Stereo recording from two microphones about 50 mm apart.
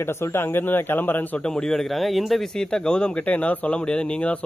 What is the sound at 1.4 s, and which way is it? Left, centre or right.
Speech, centre.